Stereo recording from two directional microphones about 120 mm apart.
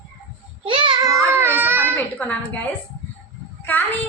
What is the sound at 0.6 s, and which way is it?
Child singing, 45° right (ahead or behind).